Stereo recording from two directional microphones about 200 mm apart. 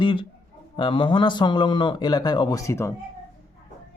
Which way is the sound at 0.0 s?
25° left (ahead or behind).